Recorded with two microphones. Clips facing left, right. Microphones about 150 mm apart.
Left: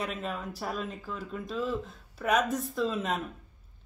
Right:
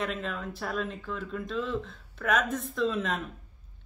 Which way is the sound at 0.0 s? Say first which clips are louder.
Right 1 dB; 5° left (ahead or behind).